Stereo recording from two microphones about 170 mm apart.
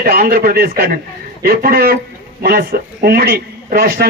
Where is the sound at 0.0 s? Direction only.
60° right (ahead or behind).